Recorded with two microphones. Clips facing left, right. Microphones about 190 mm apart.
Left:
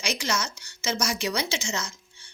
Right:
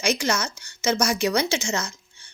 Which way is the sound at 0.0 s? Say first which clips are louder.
Right 5 dB; 50° right (ahead or behind).